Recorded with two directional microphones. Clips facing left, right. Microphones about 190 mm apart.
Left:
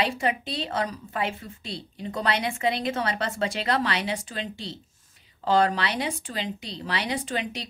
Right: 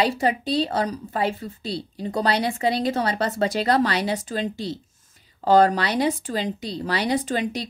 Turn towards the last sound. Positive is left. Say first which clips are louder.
# right 6 dB
turn(degrees=-40)  # may be behind; listen again after turning